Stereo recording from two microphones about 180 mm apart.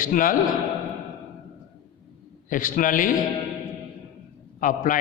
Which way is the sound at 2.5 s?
50° left (ahead or behind).